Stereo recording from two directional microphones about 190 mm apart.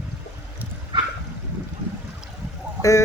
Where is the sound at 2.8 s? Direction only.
15° left (ahead or behind).